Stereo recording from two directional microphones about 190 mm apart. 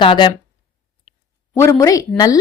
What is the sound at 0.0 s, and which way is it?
Speech, 30° left (ahead or behind).